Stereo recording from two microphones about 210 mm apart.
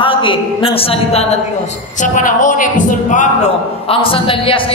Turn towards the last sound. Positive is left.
turn(degrees=25)  # may be behind; listen again after turning